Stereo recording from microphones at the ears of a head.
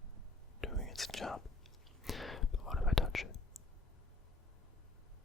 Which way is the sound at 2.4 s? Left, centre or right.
Left.